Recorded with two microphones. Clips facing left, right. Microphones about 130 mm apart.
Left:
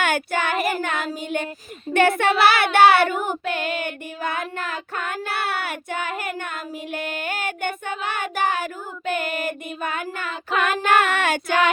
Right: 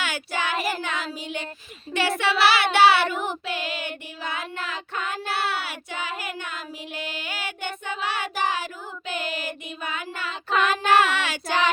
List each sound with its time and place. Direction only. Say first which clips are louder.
0.0 s child singing: left 6 dB; 55° left (ahead or behind)